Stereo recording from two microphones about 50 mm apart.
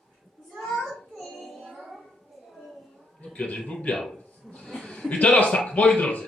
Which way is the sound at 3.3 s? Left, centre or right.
Left.